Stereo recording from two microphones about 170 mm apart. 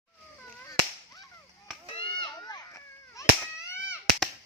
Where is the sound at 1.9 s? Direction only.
30° left (ahead or behind); by 4.0 s 15° left (ahead or behind).